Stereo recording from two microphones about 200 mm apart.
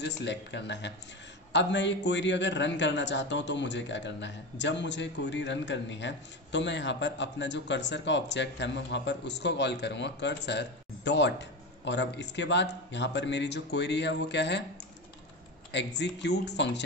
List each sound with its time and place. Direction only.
0.0 s a man's voice: 60° left (ahead or behind)
15.7 s a man's voice: 60° left (ahead or behind)